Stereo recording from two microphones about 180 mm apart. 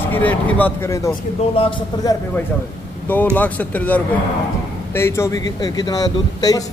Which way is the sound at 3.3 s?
10° left (ahead or behind).